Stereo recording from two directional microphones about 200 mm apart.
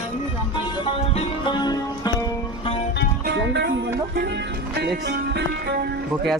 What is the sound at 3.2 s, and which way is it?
Speech, 60° right (ahead or behind).